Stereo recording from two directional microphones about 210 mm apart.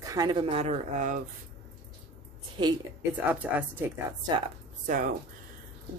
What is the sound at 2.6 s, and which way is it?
Speech, 25° right (ahead or behind).